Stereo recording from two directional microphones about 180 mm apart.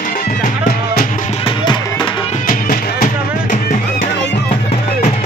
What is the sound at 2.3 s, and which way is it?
Music, 50° left (ahead or behind).